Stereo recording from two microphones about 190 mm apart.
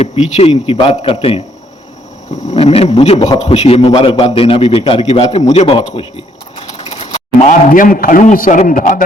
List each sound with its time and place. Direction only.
0.0 s a man's voice: 30° left (ahead or behind)